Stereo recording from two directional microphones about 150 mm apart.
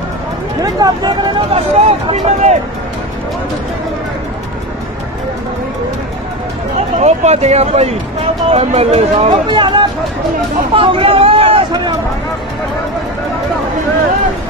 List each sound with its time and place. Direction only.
0.6 s speech: 25° right (ahead or behind)
1.5 s speech: 45° right (ahead or behind)
7.0 s speech: 45° right (ahead or behind)
9.5 s speech: 30° right (ahead or behind)